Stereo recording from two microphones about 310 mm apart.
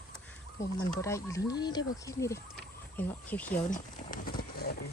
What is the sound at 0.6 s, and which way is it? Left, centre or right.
Speech, centre.